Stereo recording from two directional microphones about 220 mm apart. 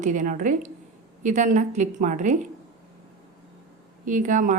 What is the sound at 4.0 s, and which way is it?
Speech, 35° right (ahead or behind).